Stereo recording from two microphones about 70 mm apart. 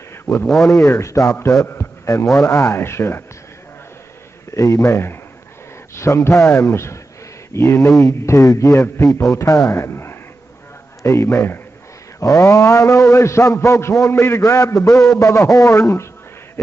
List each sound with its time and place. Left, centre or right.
0.1 s a sound: left
0.7 s a man's voice: left
4.6 s a man's voice: left
12.2 s a man's voice: left